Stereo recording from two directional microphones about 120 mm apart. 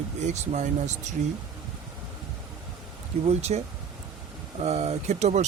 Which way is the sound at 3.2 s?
65° right (ahead or behind).